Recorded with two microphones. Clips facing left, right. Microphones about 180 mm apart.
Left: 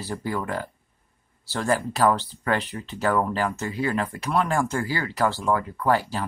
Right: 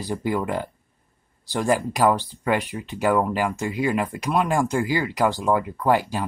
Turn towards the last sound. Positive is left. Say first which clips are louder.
# right 2 dB
turn(degrees=-15)  # may be behind; listen again after turning